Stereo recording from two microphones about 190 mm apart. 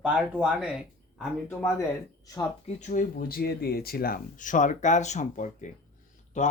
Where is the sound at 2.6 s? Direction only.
40° left (ahead or behind).